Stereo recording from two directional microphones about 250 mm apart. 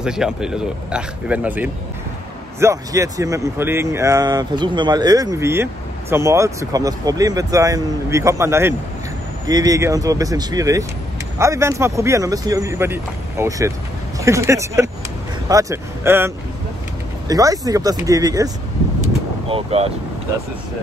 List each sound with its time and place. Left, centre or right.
0.0 s speech: centre
19.5 s speech: right